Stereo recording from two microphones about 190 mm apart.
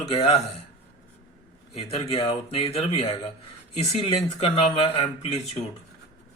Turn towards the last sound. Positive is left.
turn(degrees=35)  # may be behind; listen again after turning